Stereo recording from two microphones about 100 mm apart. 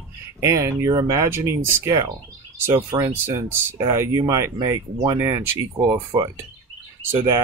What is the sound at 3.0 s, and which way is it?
Speech, 25° right (ahead or behind).